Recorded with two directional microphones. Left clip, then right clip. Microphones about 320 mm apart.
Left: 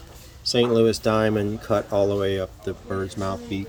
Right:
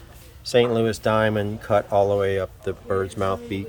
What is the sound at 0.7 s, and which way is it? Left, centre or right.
Speech, right.